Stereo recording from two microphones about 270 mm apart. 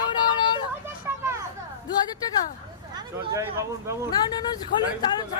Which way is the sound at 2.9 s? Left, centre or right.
Centre.